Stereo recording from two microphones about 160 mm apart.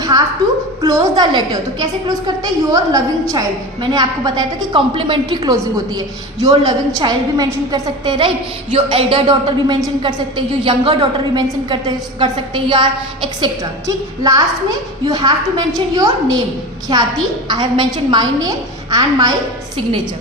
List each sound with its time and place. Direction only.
0.1 s a woman's voice: 25° right (ahead or behind)